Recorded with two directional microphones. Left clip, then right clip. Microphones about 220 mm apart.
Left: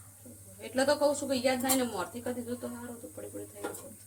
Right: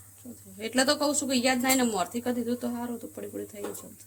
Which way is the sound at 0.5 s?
50° right (ahead or behind).